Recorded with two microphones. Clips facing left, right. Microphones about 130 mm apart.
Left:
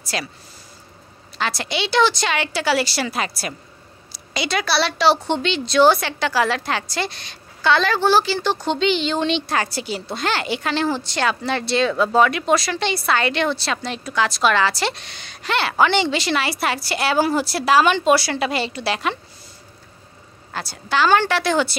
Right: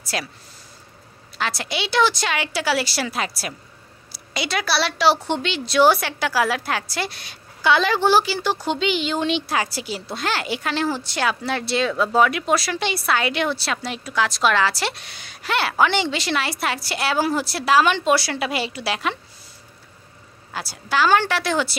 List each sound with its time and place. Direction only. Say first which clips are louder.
0.0 s speech: left 1 dB; centre (ahead or behind)
1.4 s a woman's voice: left 2 dB; centre (ahead or behind)
20.5 s a woman's voice: left 1 dB; 5° right (ahead or behind)